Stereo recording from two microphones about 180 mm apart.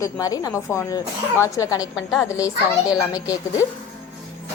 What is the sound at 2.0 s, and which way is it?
Speech, centre (ahead or behind).